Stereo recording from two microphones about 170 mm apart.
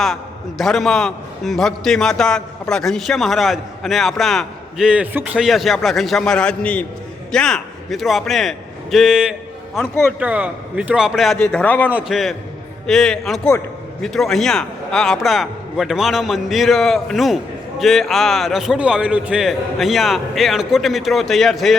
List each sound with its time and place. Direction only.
0.6 s a man's voice: centre (ahead or behind)
11.5 s a man's voice: 10° left (ahead or behind)
11.9 s a man's voice: 5° right (ahead or behind)